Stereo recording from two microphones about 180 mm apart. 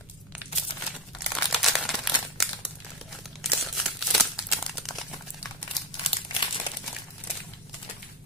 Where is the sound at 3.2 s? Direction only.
Centre (ahead or behind).